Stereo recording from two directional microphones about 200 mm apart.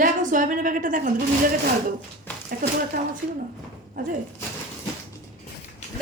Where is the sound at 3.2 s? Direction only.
45° right (ahead or behind).